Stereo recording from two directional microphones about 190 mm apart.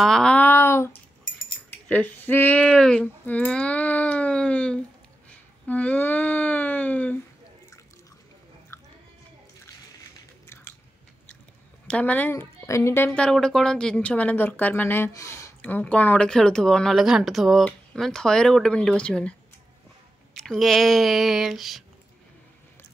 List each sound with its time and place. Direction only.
0.0 s a sound: 5° left (ahead or behind)
1.9 s speech: 10° left (ahead or behind)
5.7 s a sound: 10° left (ahead or behind)
10.4 s biting: 15° left (ahead or behind)
11.9 s a woman's voice: 5° left (ahead or behind)
20.4 s a woman's voice: centre (ahead or behind)